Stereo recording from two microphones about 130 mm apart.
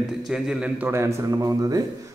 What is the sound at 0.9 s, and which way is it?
Speech, 20° right (ahead or behind).